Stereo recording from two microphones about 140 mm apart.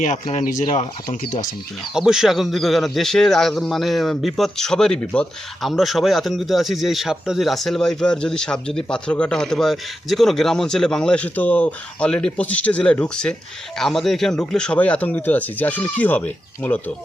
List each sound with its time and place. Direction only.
0.0 s speech: 60° left (ahead or behind)
0.6 s speech: 50° left (ahead or behind)
1.1 s speech: 70° left (ahead or behind)
1.9 s a man's voice: 5° right (ahead or behind); by 16.9 s 10° left (ahead or behind)